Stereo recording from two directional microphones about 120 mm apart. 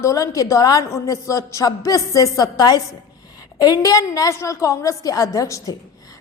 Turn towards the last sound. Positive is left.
turn(degrees=30)  # may be behind; listen again after turning